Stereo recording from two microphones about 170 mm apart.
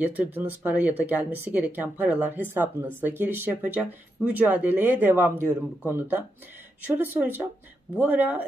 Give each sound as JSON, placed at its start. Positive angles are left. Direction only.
{"t": 0.0, "sound": "speech", "side_deg": -10}